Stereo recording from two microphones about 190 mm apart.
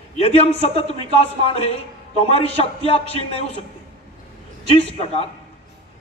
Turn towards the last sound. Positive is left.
turn(degrees=30)  # may be behind; listen again after turning